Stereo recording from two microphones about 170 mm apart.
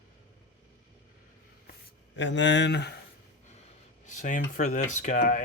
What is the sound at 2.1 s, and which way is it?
Speech, 90° left.